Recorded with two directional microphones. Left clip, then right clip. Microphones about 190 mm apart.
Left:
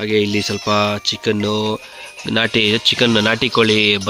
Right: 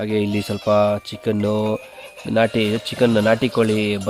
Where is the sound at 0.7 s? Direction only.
Centre (ahead or behind).